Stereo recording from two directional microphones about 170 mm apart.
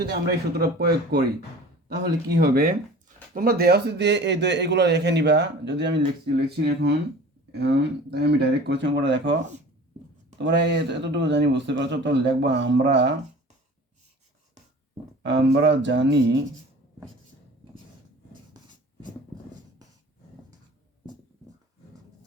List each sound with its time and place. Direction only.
0.0 s speech: 70° right (ahead or behind)
2.4 s speech: 60° right (ahead or behind); by 6.0 s 90° right
6.6 s speech: 70° right (ahead or behind); by 9.3 s 90° right
10.3 s speech: 90° right
15.2 s speech: 90° right